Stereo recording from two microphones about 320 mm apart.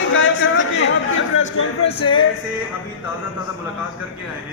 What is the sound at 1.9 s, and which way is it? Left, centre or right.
Music, centre.